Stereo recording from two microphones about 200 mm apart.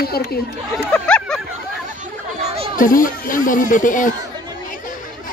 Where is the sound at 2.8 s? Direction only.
45° left (ahead or behind).